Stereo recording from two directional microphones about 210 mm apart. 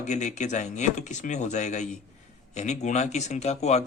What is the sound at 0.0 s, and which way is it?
Speech, 35° left (ahead or behind).